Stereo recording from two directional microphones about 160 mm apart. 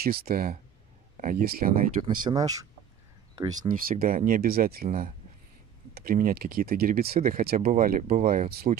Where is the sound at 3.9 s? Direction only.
60° right (ahead or behind).